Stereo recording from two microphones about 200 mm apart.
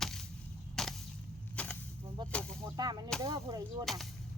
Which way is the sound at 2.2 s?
20° right (ahead or behind).